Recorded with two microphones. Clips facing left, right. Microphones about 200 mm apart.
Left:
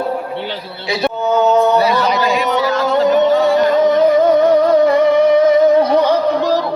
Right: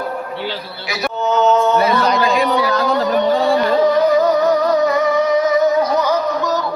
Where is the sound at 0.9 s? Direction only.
25° left (ahead or behind).